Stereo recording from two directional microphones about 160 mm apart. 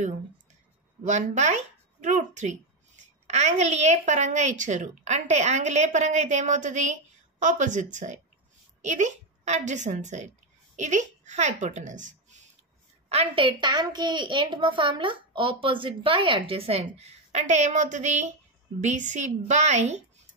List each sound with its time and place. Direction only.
1.0 s a woman's voice: 50° right (ahead or behind)
13.1 s a child's voice: 30° right (ahead or behind)